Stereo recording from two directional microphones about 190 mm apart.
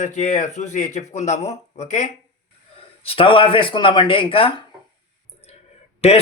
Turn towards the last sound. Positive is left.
turn(degrees=35)  # may be behind; listen again after turning